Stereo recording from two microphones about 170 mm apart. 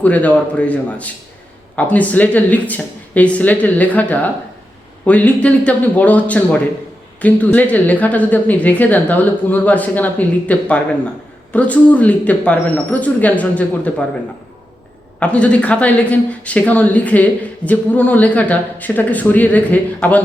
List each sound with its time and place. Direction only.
0.0 s a woman's voice: 10° left (ahead or behind)
15.2 s a woman's voice: 5° left (ahead or behind)